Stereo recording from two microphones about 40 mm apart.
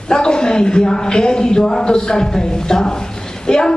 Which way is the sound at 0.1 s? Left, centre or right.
Centre.